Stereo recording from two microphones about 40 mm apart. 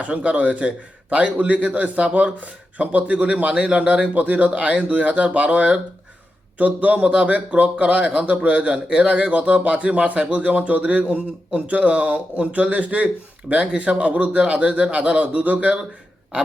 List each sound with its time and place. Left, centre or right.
0.3 s a man's voice: right